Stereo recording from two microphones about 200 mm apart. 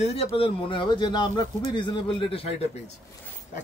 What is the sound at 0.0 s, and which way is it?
Speech, 30° left (ahead or behind).